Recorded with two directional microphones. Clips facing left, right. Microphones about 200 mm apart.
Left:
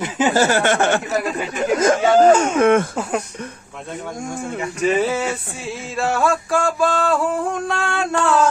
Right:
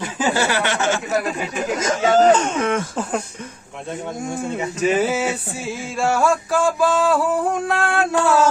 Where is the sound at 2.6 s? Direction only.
55° left (ahead or behind).